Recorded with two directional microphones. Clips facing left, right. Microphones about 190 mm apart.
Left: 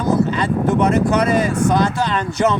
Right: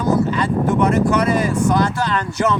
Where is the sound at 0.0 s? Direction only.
20° left (ahead or behind).